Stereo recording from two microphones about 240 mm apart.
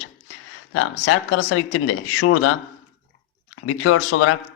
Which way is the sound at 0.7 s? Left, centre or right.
Left.